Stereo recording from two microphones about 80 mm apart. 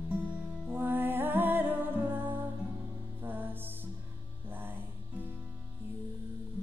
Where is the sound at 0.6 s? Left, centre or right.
Right.